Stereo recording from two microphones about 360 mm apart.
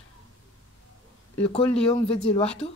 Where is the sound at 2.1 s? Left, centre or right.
Centre.